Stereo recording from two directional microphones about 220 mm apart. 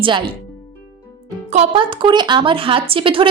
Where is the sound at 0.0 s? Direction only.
20° right (ahead or behind).